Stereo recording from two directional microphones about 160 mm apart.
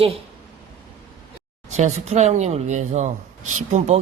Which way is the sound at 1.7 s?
45° right (ahead or behind).